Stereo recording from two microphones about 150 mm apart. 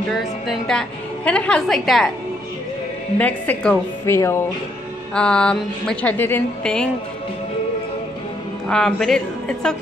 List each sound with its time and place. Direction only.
0.1 s a woman's voice: centre (ahead or behind)
3.2 s speech: 10° left (ahead or behind)
5.1 s a woman's voice: 5° left (ahead or behind)
8.6 s a woman's voice: 5° left (ahead or behind)